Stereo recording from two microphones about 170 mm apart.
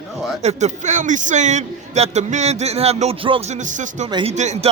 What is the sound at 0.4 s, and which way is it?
Speech, 45° right (ahead or behind).